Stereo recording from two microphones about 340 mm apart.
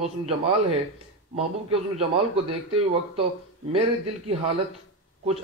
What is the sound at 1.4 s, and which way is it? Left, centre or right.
Speech, centre.